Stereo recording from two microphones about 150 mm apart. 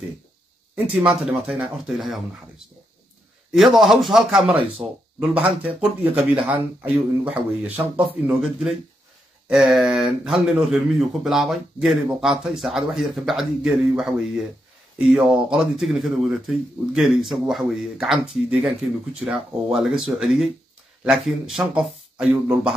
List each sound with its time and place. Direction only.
0.9 s speech: 10° right (ahead or behind)
3.5 s speech: centre (ahead or behind)
6.0 s speech: 40° right (ahead or behind)
6.8 s speech: 10° right (ahead or behind)